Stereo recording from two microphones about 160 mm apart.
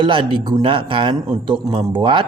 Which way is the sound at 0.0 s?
30° right (ahead or behind).